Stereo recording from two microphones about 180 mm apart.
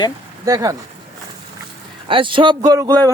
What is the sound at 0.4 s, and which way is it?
Speech, 20° right (ahead or behind).